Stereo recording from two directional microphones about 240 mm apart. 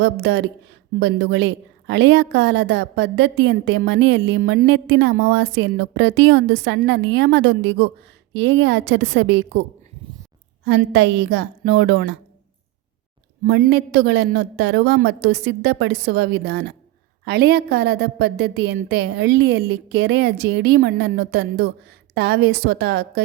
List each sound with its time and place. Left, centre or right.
0.0 s a woman's voice: right
10.7 s a woman's voice: right
13.4 s a woman's voice: right